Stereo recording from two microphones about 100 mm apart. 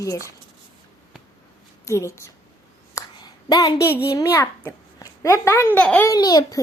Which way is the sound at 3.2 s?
40° left (ahead or behind).